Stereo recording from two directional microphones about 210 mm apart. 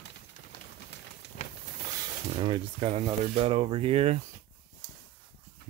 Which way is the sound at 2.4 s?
25° right (ahead or behind).